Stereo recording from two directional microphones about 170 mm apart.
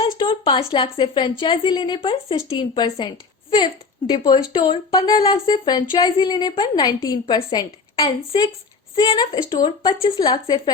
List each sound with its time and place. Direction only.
0.0 s a woman's voice: 30° left (ahead or behind)
4.1 s a woman's voice: 25° left (ahead or behind)